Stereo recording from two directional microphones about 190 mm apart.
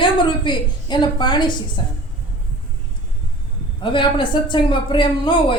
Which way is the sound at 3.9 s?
25° left (ahead or behind).